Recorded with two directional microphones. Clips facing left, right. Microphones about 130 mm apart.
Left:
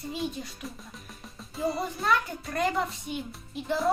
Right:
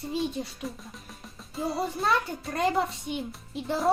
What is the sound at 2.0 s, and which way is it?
Speech, 25° right (ahead or behind).